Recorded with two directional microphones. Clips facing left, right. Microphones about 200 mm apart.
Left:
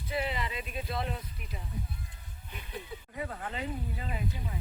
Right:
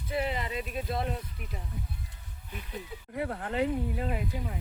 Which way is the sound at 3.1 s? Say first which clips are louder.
Right 7 dB; 65° right (ahead or behind).